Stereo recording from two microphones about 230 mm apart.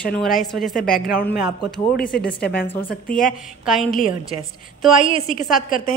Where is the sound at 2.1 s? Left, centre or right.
Left.